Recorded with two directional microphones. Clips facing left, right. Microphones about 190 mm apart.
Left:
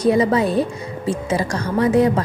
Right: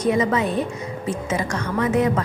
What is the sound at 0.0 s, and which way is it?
A woman's voice, 35° left (ahead or behind).